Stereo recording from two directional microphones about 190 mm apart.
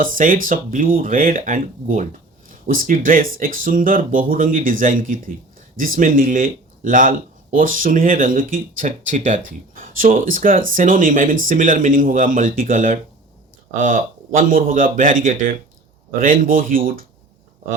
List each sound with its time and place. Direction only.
0.0 s speech: 45° right (ahead or behind)